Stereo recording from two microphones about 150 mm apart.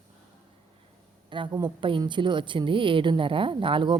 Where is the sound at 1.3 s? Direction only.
30° right (ahead or behind).